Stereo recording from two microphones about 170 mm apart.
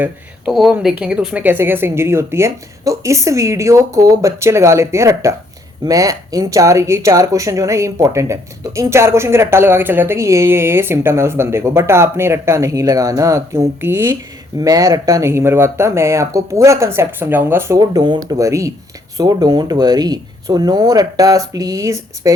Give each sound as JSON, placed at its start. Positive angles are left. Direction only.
{"t": 0.0, "sound": "speech", "side_deg": -5}